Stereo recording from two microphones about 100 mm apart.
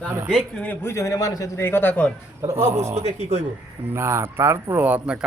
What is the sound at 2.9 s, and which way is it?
Speech, 90° right.